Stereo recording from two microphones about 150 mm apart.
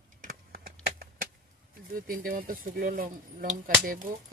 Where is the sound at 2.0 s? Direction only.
70° right (ahead or behind).